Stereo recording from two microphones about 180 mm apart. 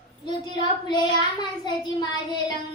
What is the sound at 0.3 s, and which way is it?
A child's voice, 25° left (ahead or behind).